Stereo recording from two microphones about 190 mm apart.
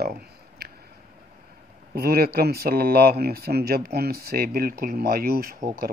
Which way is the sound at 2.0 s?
50° right (ahead or behind).